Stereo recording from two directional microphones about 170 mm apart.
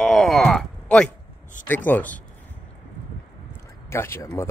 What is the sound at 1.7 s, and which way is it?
Speech, 10° left (ahead or behind).